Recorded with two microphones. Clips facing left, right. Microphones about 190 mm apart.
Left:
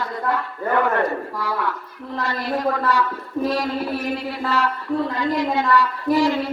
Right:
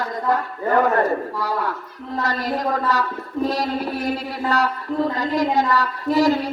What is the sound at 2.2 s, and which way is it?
Speech, 40° right (ahead or behind).